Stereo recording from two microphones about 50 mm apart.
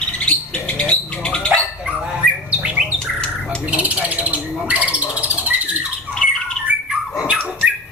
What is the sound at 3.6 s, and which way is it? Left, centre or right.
Bird, right.